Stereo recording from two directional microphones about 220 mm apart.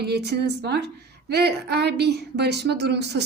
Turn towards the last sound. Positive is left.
turn(degrees=-50)  # may be behind; listen again after turning